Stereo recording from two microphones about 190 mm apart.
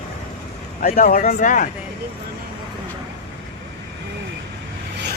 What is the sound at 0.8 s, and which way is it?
Speech, 50° left (ahead or behind).